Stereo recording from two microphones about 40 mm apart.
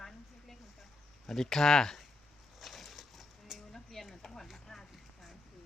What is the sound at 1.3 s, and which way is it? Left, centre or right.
Speech, centre.